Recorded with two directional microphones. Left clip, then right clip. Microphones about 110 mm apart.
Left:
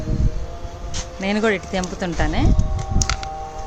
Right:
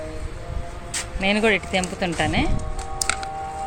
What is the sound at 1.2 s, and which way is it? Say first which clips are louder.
A woman's voice: right 1 dB; 30° left (ahead or behind).